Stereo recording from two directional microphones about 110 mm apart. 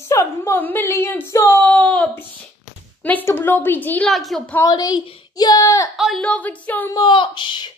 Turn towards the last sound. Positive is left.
turn(degrees=45)  # may be behind; listen again after turning